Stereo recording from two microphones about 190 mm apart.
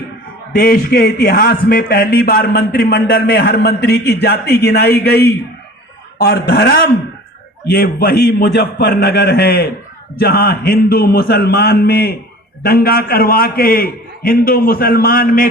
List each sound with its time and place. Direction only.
0.5 s a man's voice: 50° left (ahead or behind)